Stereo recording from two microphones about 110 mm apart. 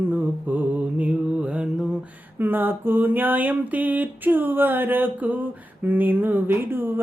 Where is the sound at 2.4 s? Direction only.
20° right (ahead or behind).